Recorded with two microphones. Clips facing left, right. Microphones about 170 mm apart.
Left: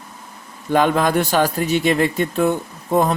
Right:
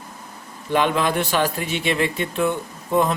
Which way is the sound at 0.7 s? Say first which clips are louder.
Left 4 dB; 45° left (ahead or behind).